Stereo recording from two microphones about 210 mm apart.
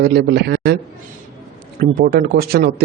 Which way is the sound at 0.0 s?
50° right (ahead or behind).